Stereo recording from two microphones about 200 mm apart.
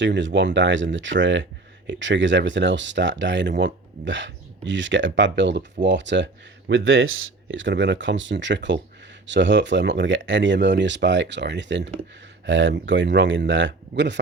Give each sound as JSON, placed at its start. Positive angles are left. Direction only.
{"t": 0.0, "sound": "speech", "side_deg": -65}
{"t": 6.7, "sound": "speech", "side_deg": -80}